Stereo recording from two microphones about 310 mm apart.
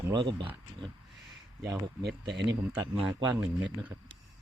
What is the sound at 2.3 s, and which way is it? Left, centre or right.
Speech, right.